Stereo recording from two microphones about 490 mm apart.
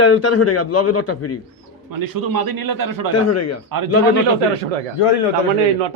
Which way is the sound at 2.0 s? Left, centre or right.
Right.